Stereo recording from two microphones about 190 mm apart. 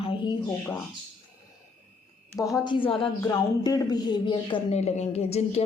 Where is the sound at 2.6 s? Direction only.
25° left (ahead or behind).